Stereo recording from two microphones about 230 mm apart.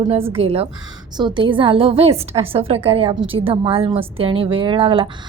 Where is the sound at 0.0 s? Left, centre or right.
Right.